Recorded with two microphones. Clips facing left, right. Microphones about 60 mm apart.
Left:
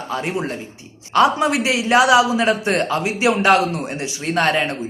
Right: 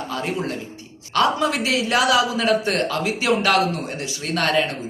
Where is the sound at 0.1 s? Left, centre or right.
Left.